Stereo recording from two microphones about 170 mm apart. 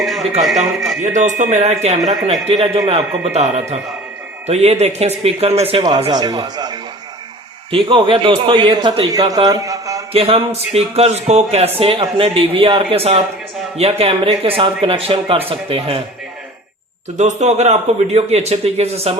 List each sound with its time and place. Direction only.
0.0 s speech: centre (ahead or behind)
1.1 s speech: 45° right (ahead or behind)
6.0 s a man's voice: 25° right (ahead or behind)
9.5 s mantra: 20° right (ahead or behind)
10.1 s speech: 35° right (ahead or behind)
17.2 s speech: 40° right (ahead or behind)